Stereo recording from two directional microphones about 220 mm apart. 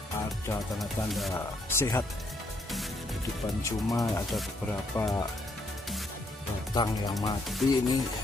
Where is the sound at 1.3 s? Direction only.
15° left (ahead or behind).